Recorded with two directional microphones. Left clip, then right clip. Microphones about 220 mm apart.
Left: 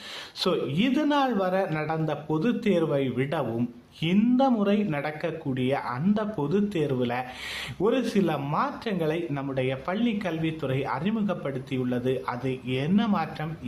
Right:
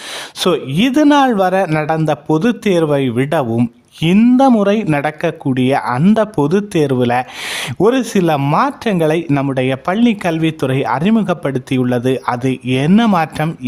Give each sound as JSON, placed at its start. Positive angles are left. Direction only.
{"t": 0.3, "sound": "speech", "side_deg": -45}